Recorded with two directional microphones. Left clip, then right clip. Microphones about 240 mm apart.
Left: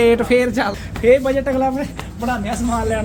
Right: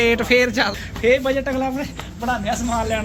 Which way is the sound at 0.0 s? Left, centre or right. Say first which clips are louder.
Left 2 dB; centre.